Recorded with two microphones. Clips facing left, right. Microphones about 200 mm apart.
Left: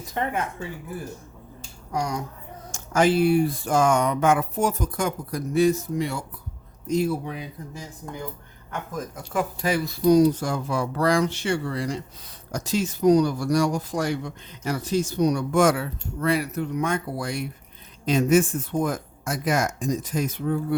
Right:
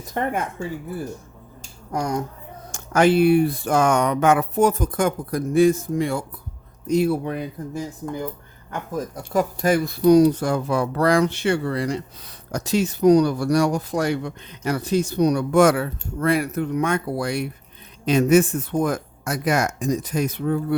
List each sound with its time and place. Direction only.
1.9 s speech: 50° right (ahead or behind)
2.7 s speech: 65° right (ahead or behind)
6.8 s speech: 65° right (ahead or behind)
8.9 s speech: 35° right (ahead or behind); by 20.7 s 65° right (ahead or behind)